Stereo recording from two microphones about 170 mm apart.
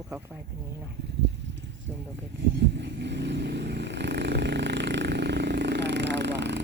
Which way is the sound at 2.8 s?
90° right.